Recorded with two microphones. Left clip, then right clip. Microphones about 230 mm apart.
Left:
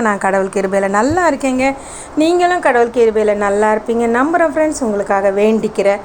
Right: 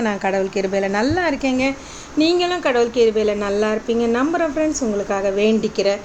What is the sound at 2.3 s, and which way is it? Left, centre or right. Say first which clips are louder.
Speech: left 8 dB; centre.